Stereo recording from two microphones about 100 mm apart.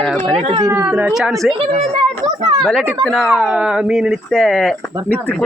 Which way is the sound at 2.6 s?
5° left (ahead or behind).